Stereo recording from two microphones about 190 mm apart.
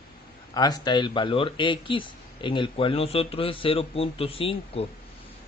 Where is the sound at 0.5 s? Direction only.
20° left (ahead or behind).